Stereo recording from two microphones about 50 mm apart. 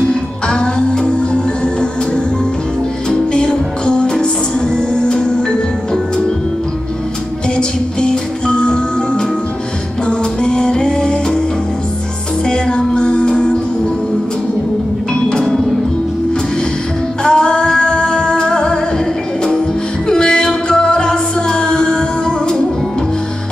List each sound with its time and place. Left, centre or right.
0.1 s music: centre
7.4 s music: centre
12.4 s music: centre
17.2 s music: centre
20.1 s music: centre